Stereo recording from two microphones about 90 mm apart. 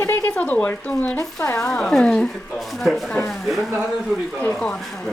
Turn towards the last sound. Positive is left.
turn(degrees=5)  # may be behind; listen again after turning